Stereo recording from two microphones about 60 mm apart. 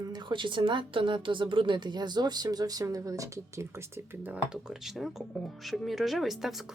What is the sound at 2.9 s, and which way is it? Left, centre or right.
Speech, right.